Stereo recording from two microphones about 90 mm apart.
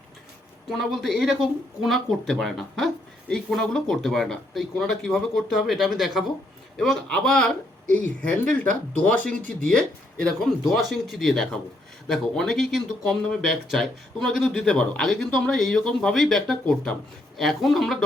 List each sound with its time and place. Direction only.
0.7 s speech: centre (ahead or behind)
10.7 s speech: centre (ahead or behind)